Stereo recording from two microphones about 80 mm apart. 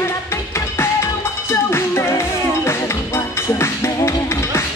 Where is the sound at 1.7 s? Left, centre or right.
Left.